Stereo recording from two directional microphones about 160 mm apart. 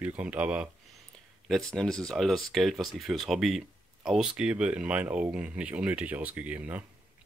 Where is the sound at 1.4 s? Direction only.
Centre (ahead or behind).